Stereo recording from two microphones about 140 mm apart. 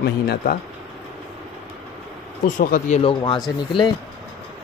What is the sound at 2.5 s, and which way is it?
Speech, 70° left (ahead or behind).